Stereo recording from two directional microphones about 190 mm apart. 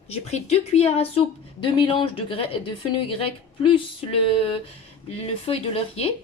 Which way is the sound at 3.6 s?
30° left (ahead or behind).